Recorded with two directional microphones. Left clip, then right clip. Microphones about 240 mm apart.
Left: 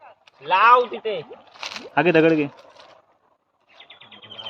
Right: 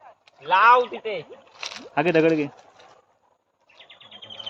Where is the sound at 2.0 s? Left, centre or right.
Centre.